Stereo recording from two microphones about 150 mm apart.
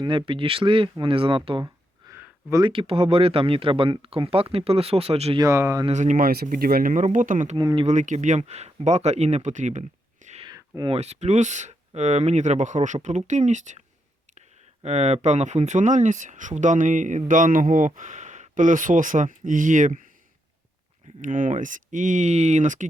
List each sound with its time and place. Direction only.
0.0 s speech: 35° right (ahead or behind)
2.0 s a sound: 15° right (ahead or behind)
2.6 s speech: 35° right (ahead or behind)
5.4 s speech: 20° right (ahead or behind)
5.9 s speech: 55° right (ahead or behind)
7.5 s speech: 30° right (ahead or behind)
7.9 s speech: 55° right (ahead or behind)
10.4 s a sound: 30° right (ahead or behind)
10.9 s speech: 45° right (ahead or behind)
14.8 s speech: 45° right (ahead or behind)
21.2 s speech: 60° right (ahead or behind)